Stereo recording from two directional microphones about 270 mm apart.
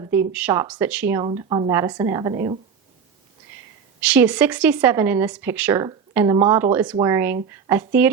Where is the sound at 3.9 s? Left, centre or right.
Centre.